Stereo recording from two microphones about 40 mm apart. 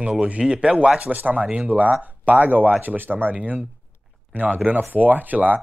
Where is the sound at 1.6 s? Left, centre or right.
Right.